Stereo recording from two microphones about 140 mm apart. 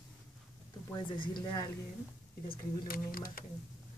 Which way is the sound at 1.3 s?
30° left (ahead or behind).